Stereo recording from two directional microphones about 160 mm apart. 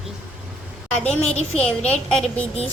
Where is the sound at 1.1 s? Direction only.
40° left (ahead or behind).